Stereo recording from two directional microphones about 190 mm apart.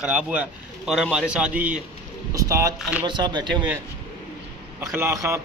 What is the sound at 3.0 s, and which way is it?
Speech, 25° right (ahead or behind).